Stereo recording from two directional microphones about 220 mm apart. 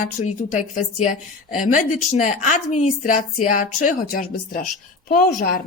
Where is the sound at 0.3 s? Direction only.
35° left (ahead or behind).